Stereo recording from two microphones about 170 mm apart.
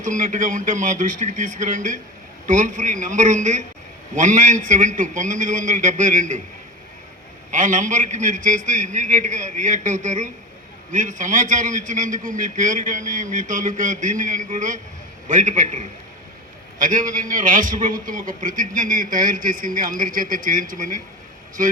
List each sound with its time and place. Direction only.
0.0 s a man's voice: 50° right (ahead or behind)
7.5 s a man's voice: 50° right (ahead or behind)